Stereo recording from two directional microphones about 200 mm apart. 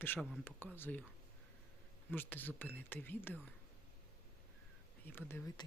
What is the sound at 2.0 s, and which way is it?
Speech, 10° left (ahead or behind).